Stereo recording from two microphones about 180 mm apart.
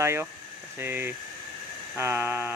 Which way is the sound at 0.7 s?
10° right (ahead or behind).